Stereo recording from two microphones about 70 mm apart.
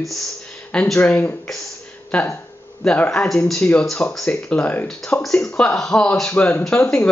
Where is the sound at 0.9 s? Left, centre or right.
Left.